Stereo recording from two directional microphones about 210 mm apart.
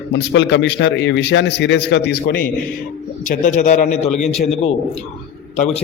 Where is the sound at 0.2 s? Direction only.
55° left (ahead or behind).